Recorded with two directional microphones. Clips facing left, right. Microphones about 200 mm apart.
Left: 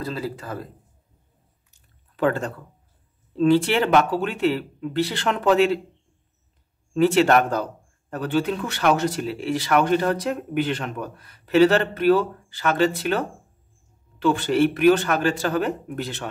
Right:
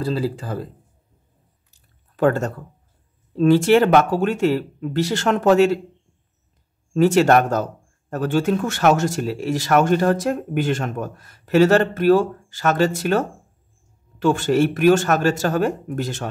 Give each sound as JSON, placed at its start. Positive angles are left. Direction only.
{"t": 0.0, "sound": "speech", "side_deg": -30}
{"t": 1.7, "sound": "chewing", "side_deg": -45}
{"t": 3.3, "sound": "speech", "side_deg": -45}
{"t": 6.9, "sound": "speech", "side_deg": -45}